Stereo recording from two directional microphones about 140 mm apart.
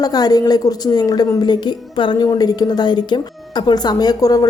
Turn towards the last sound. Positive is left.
turn(degrees=25)  # may be behind; listen again after turning